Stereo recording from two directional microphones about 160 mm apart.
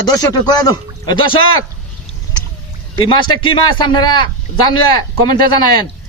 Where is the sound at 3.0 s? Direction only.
30° left (ahead or behind).